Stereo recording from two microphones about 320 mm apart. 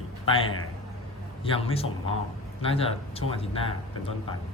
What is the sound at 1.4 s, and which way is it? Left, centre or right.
Speech, centre.